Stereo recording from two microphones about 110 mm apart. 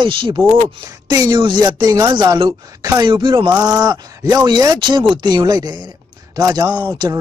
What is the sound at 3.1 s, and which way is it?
Speech, 45° right (ahead or behind).